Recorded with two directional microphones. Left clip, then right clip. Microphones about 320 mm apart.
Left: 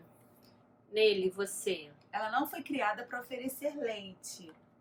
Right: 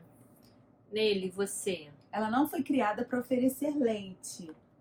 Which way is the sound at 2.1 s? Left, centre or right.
Centre.